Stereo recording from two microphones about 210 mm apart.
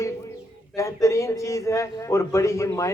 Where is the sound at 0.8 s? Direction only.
15° left (ahead or behind).